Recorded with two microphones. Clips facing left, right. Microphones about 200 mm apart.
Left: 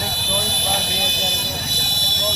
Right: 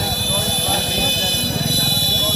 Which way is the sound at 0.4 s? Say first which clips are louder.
Right 3 dB; 55° right (ahead or behind).